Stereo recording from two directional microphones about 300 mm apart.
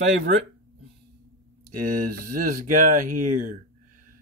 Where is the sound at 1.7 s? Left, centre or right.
Right.